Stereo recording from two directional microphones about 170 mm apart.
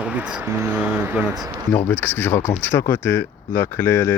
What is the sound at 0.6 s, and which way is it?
Speech, 10° right (ahead or behind).